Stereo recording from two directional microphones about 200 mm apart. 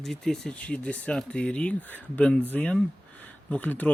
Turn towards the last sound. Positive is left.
turn(degrees=10)  # may be behind; listen again after turning